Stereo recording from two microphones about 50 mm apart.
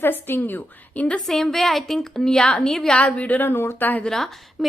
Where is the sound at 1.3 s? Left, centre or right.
Centre.